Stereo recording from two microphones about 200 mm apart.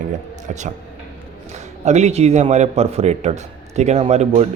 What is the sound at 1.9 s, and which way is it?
A man's voice, 35° right (ahead or behind).